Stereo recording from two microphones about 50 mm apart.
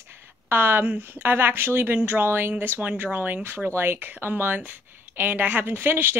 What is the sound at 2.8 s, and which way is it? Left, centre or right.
A woman's voice, right.